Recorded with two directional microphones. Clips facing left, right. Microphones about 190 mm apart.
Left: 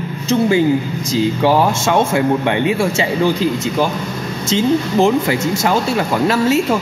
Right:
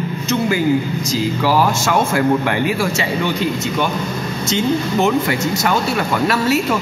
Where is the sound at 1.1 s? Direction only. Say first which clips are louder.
Left 3 dB; 25° left (ahead or behind).